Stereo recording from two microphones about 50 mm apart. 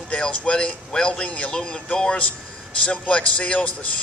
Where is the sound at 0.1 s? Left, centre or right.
Left.